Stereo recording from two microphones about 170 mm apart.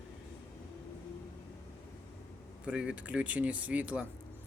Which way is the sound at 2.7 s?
5° right (ahead or behind).